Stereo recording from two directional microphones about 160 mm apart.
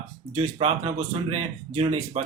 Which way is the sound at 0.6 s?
45° right (ahead or behind).